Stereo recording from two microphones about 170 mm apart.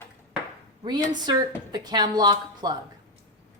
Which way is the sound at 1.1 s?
25° right (ahead or behind).